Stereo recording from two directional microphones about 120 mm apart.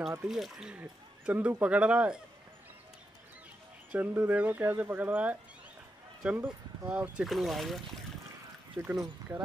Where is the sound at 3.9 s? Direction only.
15° right (ahead or behind).